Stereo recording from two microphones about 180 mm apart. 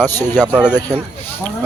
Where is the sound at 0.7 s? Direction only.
10° left (ahead or behind).